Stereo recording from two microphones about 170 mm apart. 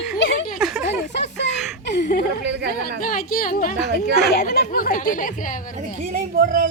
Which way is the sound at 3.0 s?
55° left (ahead or behind).